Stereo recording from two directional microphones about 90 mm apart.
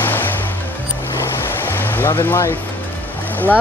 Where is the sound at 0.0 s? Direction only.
20° left (ahead or behind).